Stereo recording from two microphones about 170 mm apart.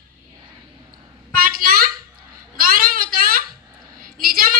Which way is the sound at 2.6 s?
55° right (ahead or behind).